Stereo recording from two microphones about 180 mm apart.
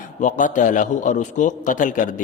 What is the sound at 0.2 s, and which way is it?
A man's voice, 45° left (ahead or behind).